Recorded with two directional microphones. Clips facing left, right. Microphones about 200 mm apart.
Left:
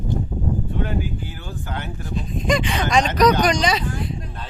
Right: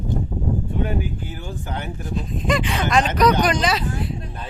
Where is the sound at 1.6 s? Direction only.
15° right (ahead or behind).